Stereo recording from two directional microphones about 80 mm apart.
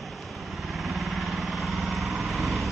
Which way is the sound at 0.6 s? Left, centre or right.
Centre.